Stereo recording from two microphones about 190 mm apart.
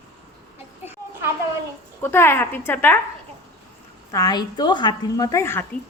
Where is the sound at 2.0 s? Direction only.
10° left (ahead or behind).